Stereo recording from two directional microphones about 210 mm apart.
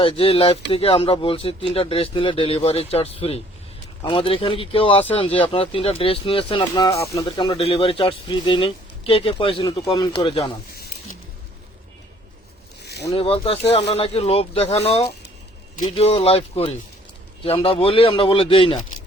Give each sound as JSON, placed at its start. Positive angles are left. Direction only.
{"t": 0.0, "sound": "speech", "side_deg": 25}
{"t": 12.8, "sound": "a sound", "side_deg": 50}
{"t": 13.1, "sound": "speech", "side_deg": 25}